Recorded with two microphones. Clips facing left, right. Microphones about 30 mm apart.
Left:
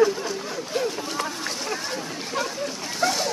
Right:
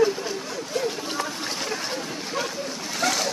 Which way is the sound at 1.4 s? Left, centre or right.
Centre.